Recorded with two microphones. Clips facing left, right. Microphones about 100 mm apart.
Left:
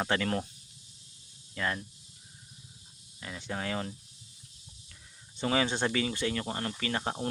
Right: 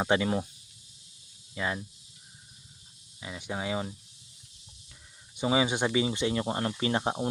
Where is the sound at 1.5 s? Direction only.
15° right (ahead or behind).